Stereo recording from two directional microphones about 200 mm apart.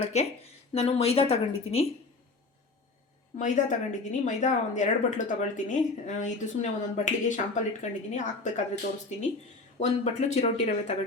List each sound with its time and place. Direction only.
0.0 s a woman's voice: 30° left (ahead or behind)
3.3 s a woman's voice: 40° left (ahead or behind)